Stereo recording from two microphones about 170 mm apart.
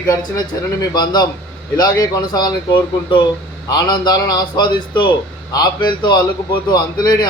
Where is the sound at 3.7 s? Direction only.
25° left (ahead or behind).